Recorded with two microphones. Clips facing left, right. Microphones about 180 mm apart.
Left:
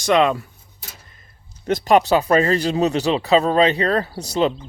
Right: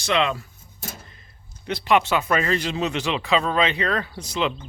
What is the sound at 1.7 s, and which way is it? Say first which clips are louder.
Speech: left 5 dB; 40° left (ahead or behind).